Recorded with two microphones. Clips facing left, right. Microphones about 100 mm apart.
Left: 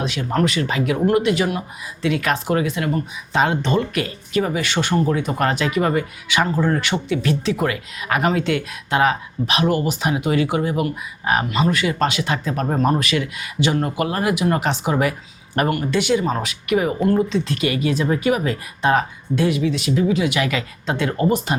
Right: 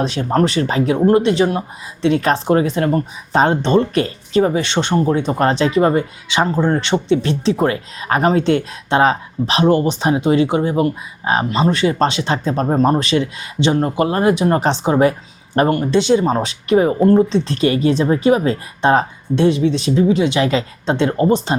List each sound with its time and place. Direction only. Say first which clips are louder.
0.0 s speech: right 4 dB; 35° right (ahead or behind)